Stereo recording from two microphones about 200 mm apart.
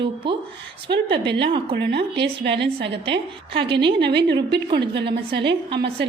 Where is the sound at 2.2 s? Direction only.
60° right (ahead or behind).